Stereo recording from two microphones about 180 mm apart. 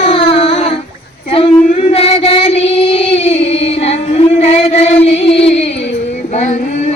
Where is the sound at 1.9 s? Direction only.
35° left (ahead or behind).